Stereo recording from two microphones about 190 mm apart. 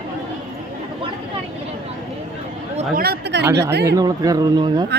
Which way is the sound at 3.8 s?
15° right (ahead or behind).